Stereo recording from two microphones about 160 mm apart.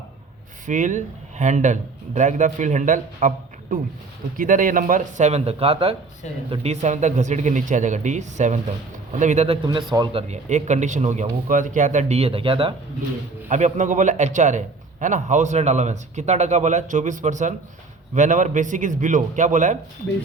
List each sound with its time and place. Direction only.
0.7 s speech: 50° right (ahead or behind)
9.6 s speech: 25° right (ahead or behind)
13.5 s speech: 50° right (ahead or behind)